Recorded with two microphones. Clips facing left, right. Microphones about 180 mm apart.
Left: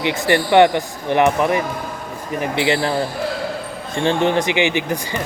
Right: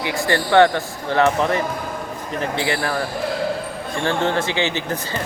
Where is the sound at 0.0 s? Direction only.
20° left (ahead or behind).